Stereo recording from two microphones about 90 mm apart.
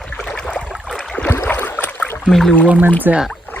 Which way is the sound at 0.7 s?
Centre (ahead or behind).